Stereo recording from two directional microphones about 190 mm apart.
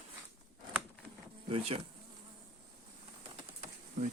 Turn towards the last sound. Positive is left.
turn(degrees=-35)  # may be behind; listen again after turning